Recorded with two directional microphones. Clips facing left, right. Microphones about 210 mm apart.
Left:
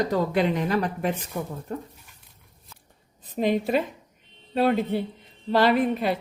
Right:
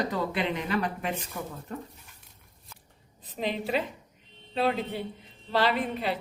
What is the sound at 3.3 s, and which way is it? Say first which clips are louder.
A woman's voice: left 6 dB; 50° left (ahead or behind).